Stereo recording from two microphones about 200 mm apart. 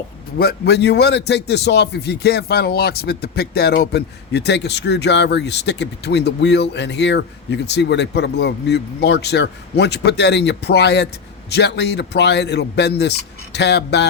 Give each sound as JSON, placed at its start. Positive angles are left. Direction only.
{"t": 0.3, "sound": "a man's voice", "side_deg": 50}